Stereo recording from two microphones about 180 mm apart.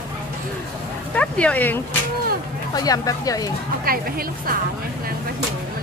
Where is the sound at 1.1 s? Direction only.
5° left (ahead or behind).